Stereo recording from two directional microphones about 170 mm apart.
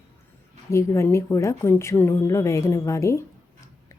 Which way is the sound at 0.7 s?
15° left (ahead or behind).